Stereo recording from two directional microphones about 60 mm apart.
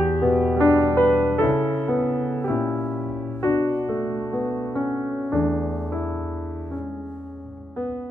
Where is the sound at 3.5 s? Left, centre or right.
Left.